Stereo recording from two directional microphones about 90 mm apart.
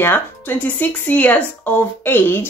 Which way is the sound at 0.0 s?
20° left (ahead or behind).